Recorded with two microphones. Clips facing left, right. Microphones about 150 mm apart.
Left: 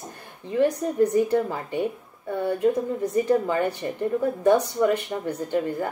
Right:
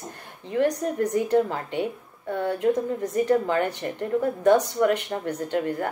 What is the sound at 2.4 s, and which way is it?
A woman's voice, 10° left (ahead or behind).